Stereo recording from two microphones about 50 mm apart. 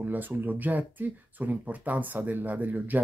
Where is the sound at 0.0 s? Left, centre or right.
Right.